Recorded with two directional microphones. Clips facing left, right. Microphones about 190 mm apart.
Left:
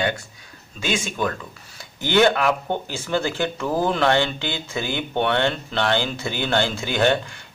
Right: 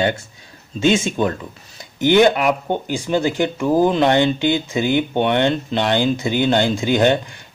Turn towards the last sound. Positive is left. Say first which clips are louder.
# right 5 dB
turn(degrees=-20)  # may be behind; listen again after turning